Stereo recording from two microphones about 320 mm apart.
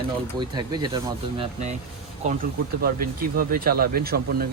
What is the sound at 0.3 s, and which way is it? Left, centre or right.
Speech, centre.